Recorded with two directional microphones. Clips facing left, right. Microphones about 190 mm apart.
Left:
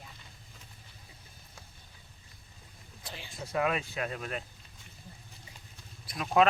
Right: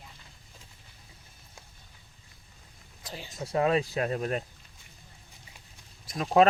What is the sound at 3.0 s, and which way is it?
Speech, 40° right (ahead or behind).